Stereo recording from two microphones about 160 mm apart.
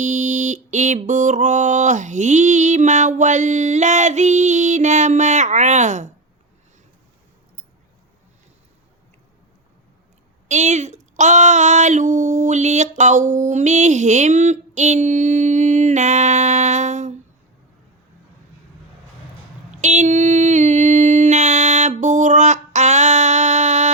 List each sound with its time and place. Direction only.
0.0 s mantra: 50° right (ahead or behind)
10.5 s speech: 45° right (ahead or behind)
19.7 s a sound: 45° right (ahead or behind)